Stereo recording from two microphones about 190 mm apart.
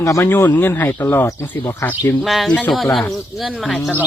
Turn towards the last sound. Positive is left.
turn(degrees=0)  # may be behind; listen again after turning